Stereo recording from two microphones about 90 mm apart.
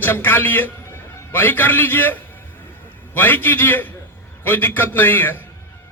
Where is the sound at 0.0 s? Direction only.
25° left (ahead or behind).